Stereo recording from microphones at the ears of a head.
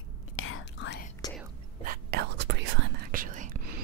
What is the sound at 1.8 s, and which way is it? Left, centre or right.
Whispering, right.